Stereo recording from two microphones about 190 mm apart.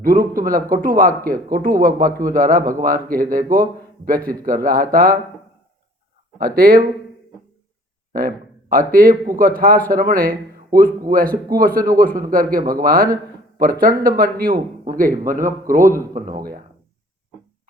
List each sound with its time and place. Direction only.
0.0 s a man's voice: 45° right (ahead or behind)
6.6 s a man's voice: 50° right (ahead or behind)
8.9 s a man's voice: 50° right (ahead or behind)